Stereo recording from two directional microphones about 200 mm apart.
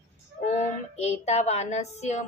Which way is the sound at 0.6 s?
35° left (ahead or behind).